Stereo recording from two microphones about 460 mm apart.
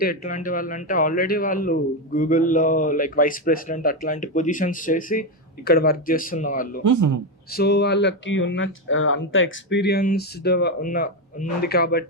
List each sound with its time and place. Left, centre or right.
0.0 s speech: centre
6.8 s speech: right
7.5 s speech: left